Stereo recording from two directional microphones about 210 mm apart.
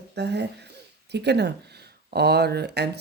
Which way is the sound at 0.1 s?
55° right (ahead or behind).